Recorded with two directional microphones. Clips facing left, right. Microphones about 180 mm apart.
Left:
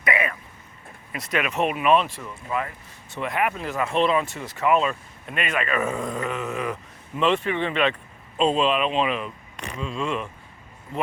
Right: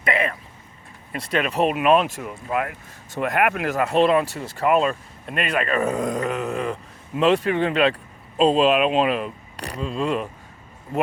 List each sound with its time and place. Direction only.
0.0 s speech: 30° right (ahead or behind)
1.7 s speech: 45° right (ahead or behind)
2.2 s speech: 60° right (ahead or behind)
3.1 s speech: 45° right (ahead or behind)
3.5 s speech: 70° right (ahead or behind)
3.8 s speech: 40° right (ahead or behind)
4.3 s speech: 35° right (ahead or behind)